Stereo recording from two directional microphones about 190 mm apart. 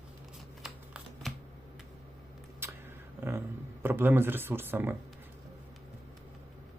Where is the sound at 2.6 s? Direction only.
10° right (ahead or behind).